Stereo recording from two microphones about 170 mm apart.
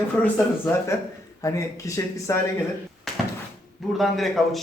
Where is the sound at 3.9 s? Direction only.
Centre (ahead or behind).